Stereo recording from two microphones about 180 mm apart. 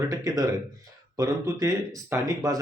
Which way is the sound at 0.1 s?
20° right (ahead or behind).